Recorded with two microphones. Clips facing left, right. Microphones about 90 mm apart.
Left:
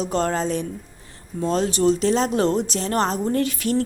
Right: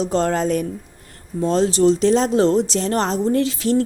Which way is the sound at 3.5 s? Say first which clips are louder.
Right 4 dB; 30° right (ahead or behind).